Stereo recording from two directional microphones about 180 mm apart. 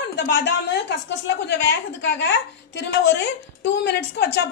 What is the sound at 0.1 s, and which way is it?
Speech, 75° left (ahead or behind).